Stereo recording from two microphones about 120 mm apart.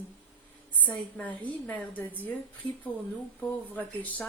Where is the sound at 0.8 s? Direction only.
10° left (ahead or behind).